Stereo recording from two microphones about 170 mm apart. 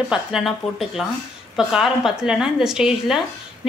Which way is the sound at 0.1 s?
Centre (ahead or behind).